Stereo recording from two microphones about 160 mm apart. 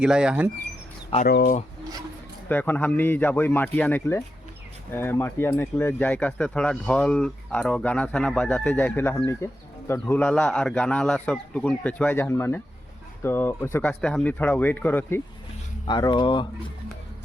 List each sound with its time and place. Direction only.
0.0 s speech: 5° right (ahead or behind)
1.2 s speech: 70° left (ahead or behind)
2.5 s speech: 10° left (ahead or behind)
15.9 s speech: 25° left (ahead or behind)